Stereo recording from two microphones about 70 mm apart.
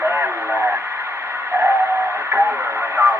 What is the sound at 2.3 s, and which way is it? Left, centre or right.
Radio, right.